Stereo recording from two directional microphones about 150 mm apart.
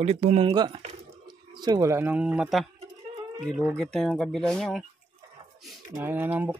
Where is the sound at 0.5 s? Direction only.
30° right (ahead or behind); by 2.7 s 5° right (ahead or behind).